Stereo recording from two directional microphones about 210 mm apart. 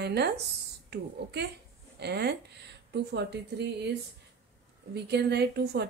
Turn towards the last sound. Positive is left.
turn(degrees=-50)  # may be behind; listen again after turning